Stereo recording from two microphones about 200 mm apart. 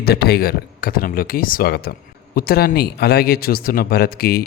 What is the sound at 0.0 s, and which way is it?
Speech, 50° left (ahead or behind).